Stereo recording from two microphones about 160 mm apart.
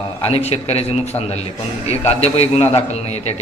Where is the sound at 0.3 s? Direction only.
40° left (ahead or behind).